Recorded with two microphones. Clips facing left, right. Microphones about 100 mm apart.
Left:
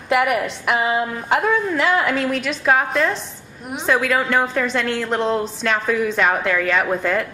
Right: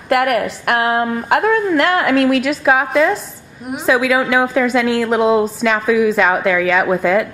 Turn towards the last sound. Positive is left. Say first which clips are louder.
# right 5 dB
turn(degrees=-5)  # may be behind; listen again after turning